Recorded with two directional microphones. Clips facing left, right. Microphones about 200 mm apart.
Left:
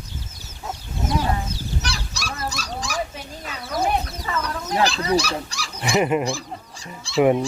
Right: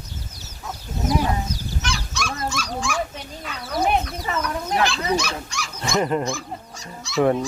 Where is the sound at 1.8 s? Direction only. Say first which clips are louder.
Right 3 dB; 35° left (ahead or behind).